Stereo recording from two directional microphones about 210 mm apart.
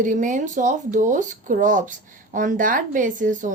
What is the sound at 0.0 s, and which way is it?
A woman's voice, 35° right (ahead or behind).